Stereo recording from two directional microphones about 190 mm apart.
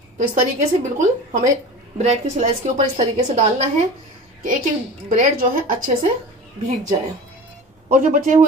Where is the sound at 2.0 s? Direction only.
35° right (ahead or behind).